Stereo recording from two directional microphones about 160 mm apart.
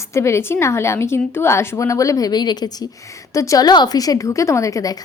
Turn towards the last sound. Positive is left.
turn(degrees=20)  # may be behind; listen again after turning